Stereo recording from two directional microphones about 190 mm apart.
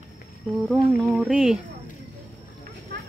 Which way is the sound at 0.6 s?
Centre (ahead or behind).